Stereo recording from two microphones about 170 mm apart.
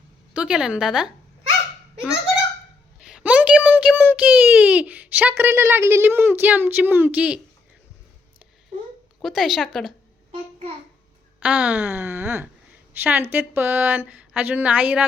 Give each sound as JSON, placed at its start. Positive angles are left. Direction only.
{"t": 0.3, "sound": "speech", "side_deg": -5}
{"t": 3.1, "sound": "a child's voice", "side_deg": -5}
{"t": 9.2, "sound": "speech", "side_deg": 0}
{"t": 11.3, "sound": "a woman's voice", "side_deg": -5}